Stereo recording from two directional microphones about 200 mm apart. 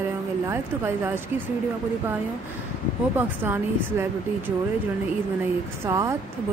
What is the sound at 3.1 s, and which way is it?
Speech, 10° right (ahead or behind).